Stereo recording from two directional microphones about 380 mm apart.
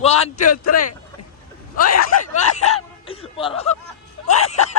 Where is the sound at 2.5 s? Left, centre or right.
Centre.